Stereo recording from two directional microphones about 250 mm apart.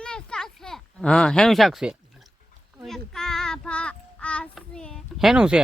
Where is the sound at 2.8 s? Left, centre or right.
Centre.